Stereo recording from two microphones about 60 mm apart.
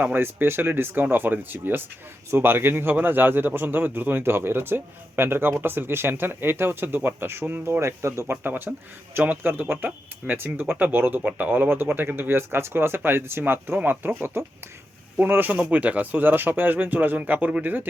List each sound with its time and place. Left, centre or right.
0.0 s a man's voice: right
8.4 s a man's voice: right